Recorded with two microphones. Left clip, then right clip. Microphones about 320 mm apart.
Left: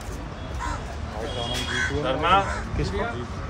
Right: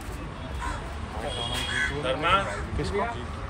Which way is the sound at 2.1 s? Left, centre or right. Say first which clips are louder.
Left 4 dB; left.